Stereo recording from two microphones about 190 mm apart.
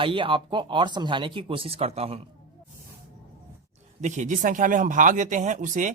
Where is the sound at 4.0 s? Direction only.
40° right (ahead or behind).